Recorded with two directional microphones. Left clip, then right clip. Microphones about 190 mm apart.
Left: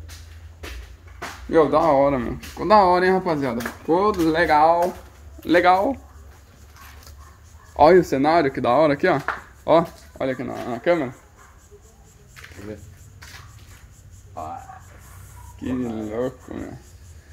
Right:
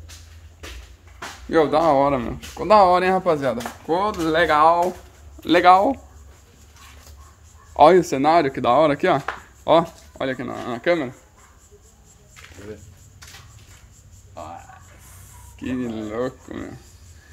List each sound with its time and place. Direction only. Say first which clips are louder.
1.5 s speech: even; 5° right (ahead or behind)
2.5 s speech: right 1 dB; centre (ahead or behind); by 5.9 s 20° right (ahead or behind)
7.7 s speech: right 1 dB; 5° right (ahead or behind)
15.6 s speech: even; 5° right (ahead or behind)